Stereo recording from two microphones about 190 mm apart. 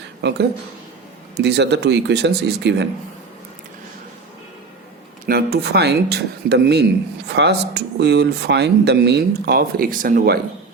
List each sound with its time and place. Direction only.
0.2 s speech: 65° right (ahead or behind)
5.2 s speech: 55° right (ahead or behind)